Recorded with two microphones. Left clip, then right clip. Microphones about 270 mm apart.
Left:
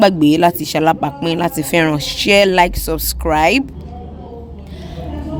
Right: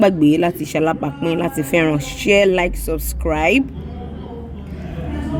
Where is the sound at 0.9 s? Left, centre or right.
Left.